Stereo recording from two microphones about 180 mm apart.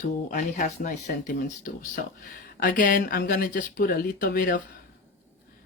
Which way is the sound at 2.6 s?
50° left (ahead or behind).